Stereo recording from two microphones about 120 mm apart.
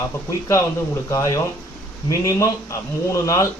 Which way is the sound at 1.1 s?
30° left (ahead or behind).